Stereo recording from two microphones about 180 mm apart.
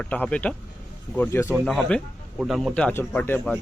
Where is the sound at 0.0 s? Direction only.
5° left (ahead or behind).